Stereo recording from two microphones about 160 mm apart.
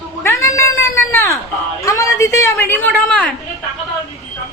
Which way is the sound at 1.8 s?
20° left (ahead or behind).